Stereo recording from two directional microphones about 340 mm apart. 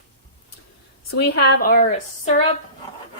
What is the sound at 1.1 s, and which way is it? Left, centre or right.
Speech, left.